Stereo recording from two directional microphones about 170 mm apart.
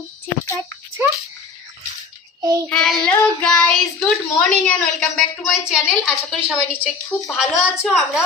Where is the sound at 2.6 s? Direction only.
5° left (ahead or behind).